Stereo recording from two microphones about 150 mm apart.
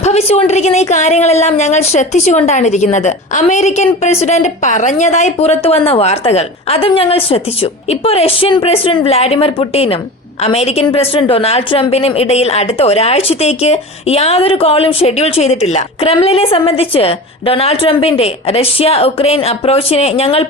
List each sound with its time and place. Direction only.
0.0 s a woman's voice: 45° left (ahead or behind)